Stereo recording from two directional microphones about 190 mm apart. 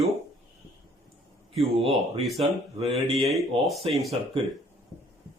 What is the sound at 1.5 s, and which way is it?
Speech, 30° right (ahead or behind).